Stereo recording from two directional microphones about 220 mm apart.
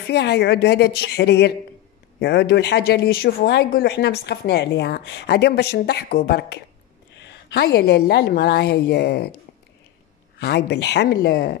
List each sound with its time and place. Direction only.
0.0 s speech: 50° left (ahead or behind)
10.4 s speech: 50° left (ahead or behind)